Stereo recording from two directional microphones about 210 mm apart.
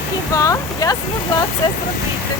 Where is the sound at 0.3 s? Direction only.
15° left (ahead or behind).